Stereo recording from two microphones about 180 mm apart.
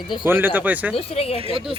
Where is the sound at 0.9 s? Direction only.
35° left (ahead or behind).